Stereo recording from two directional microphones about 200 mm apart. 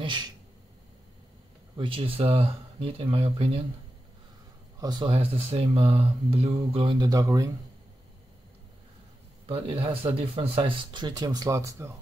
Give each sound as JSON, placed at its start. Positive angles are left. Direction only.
{"t": 0.0, "sound": "a sound", "side_deg": -25}
{"t": 1.8, "sound": "speech", "side_deg": -25}
{"t": 4.7, "sound": "speech", "side_deg": -20}
{"t": 9.5, "sound": "speech", "side_deg": -30}